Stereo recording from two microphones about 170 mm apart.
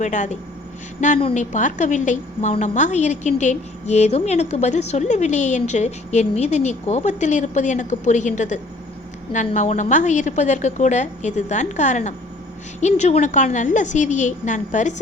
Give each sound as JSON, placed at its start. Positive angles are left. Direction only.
{"t": 0.0, "sound": "a woman's voice", "side_deg": 45}